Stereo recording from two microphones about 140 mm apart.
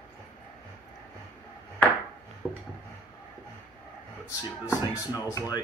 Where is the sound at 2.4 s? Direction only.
10° right (ahead or behind).